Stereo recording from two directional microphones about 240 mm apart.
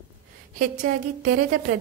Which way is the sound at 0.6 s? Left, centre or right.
Right.